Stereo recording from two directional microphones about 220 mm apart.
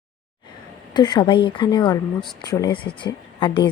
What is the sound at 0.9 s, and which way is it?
A woman's voice, 20° left (ahead or behind).